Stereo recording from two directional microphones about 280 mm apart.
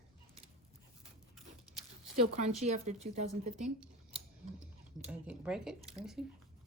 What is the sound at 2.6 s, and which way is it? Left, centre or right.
Speech, right.